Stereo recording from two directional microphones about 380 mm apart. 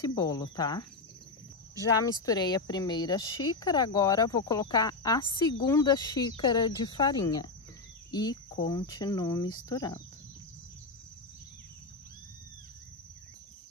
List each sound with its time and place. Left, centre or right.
0.0 s speech: centre
2.2 s speech: centre